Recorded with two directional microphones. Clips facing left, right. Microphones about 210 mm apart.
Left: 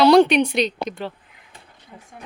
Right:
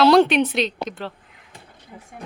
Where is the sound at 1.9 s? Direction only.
5° right (ahead or behind).